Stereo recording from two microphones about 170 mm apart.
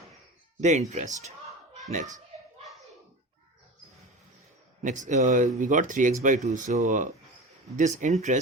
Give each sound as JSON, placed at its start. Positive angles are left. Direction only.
{"t": 0.6, "sound": "speech", "side_deg": -45}
{"t": 4.8, "sound": "speech", "side_deg": -45}